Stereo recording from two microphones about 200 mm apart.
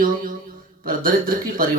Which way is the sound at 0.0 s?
45° right (ahead or behind).